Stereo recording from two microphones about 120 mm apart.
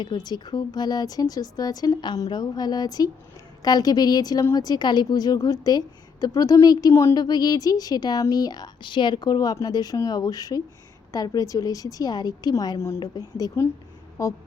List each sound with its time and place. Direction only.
0.0 s a woman's voice: 40° left (ahead or behind)